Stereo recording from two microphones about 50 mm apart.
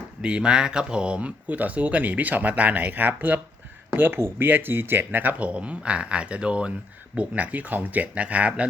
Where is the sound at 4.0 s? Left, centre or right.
Right.